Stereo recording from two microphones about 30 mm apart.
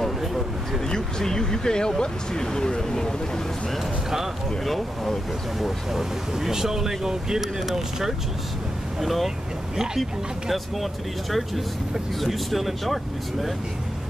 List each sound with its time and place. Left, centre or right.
0.8 s speech: left
4.6 s speech: centre
5.6 s speech: centre
10.5 s speech: centre